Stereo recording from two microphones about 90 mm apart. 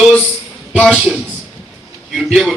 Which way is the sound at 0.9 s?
10° right (ahead or behind).